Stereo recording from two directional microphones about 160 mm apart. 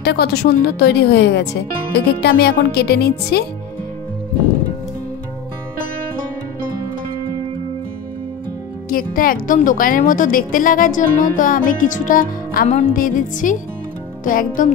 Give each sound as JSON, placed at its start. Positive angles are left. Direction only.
{"t": 0.0, "sound": "speech", "side_deg": 90}
{"t": 8.8, "sound": "speech", "side_deg": 60}
{"t": 12.9, "sound": "speech", "side_deg": 55}